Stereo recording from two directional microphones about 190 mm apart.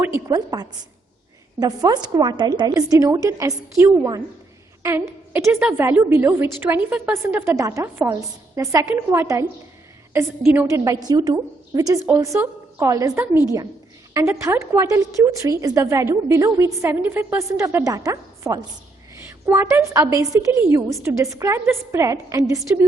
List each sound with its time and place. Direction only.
0.0 s a woman's voice: 15° right (ahead or behind)
4.8 s a sound: 15° right (ahead or behind)
5.3 s a woman's voice: 10° right (ahead or behind)